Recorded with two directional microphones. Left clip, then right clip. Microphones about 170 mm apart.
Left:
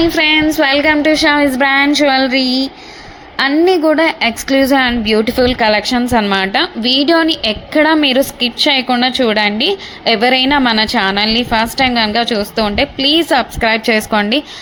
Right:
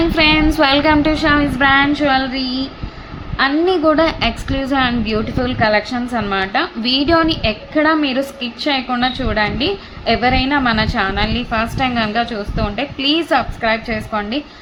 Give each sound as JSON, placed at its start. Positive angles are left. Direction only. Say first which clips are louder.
{"t": 0.0, "sound": "a woman's voice", "louder": "left 2 dB", "side_deg": 20}
{"t": 1.2, "sound": "a woman's voice", "louder": "left 3 dB", "side_deg": 30}
{"t": 3.8, "sound": "a woman's voice", "louder": "left 2 dB", "side_deg": 15}
{"t": 4.2, "sound": "a woman's voice", "louder": "left 7 dB", "side_deg": 30}
{"t": 6.8, "sound": "a woman's voice", "louder": "left 3 dB", "side_deg": 20}
{"t": 13.0, "sound": "a woman's voice", "louder": "left 3 dB", "side_deg": 20}
{"t": 13.6, "sound": "a woman's voice", "louder": "left 6 dB", "side_deg": 35}